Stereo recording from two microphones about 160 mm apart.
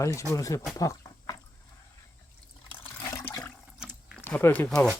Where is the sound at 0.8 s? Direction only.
20° left (ahead or behind).